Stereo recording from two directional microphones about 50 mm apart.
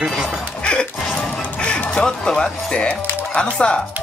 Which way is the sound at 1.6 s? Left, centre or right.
Centre.